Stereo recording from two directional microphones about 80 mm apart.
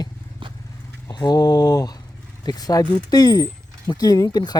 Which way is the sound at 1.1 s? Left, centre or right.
Left.